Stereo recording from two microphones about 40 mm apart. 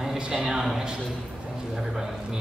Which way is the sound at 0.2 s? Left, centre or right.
Right.